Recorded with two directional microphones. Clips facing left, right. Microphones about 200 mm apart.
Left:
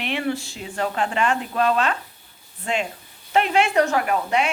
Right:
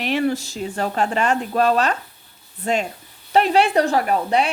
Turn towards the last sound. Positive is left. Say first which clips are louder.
# right 3 dB
turn(degrees=-35)  # may be behind; listen again after turning